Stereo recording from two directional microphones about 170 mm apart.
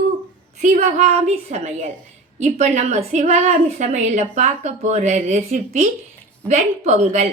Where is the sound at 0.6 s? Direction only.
45° right (ahead or behind).